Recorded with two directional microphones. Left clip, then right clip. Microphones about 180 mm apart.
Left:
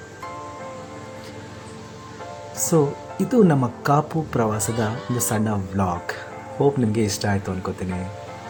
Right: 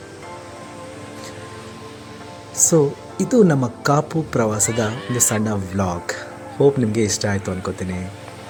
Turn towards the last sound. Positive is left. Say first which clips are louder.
# right 2 dB
turn(degrees=-5)  # may be behind; listen again after turning